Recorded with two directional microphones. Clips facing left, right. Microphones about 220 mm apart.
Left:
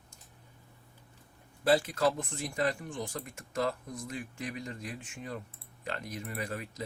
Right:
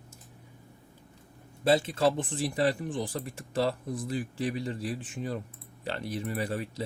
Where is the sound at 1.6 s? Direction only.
25° right (ahead or behind).